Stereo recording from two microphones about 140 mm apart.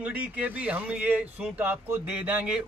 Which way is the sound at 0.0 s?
10° right (ahead or behind).